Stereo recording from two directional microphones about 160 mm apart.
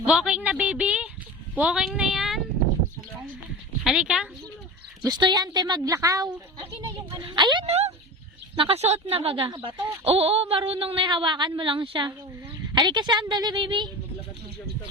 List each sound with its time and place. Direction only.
0.0 s a woman's voice: 5° right (ahead or behind)
3.8 s speech: 5° right (ahead or behind)
5.0 s a woman's voice: 25° right (ahead or behind)